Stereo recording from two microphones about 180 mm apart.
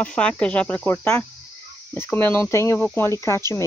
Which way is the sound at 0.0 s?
5° left (ahead or behind).